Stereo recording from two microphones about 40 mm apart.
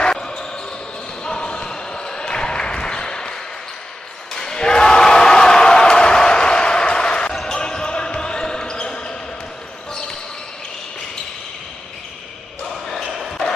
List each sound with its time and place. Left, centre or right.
0.0 s basketball bounce: left
4.3 s a sound: centre
7.4 s basketball bounce: centre
12.8 s basketball bounce: centre